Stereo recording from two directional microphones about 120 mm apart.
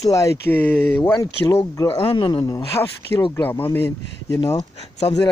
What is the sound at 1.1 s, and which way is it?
Speech, 25° left (ahead or behind).